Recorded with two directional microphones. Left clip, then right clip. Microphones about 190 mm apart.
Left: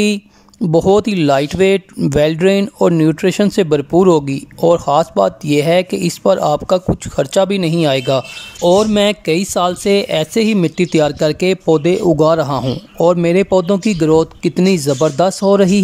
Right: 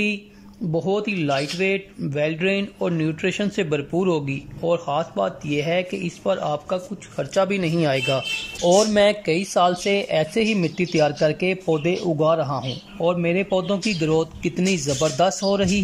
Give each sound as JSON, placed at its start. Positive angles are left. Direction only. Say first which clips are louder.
{"t": 0.7, "sound": "speech", "louder": "left 11 dB", "side_deg": 35}